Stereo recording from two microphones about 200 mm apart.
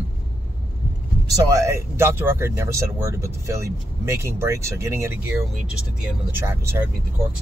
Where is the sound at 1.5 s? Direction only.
15° right (ahead or behind).